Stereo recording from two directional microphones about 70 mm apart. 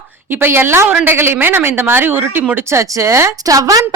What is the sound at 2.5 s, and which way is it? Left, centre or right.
A woman's voice, right.